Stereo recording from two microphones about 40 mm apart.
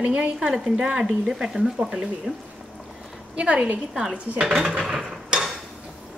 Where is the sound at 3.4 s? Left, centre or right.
Right.